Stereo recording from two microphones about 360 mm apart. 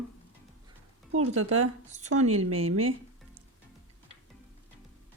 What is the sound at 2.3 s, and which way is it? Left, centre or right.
Speech, right.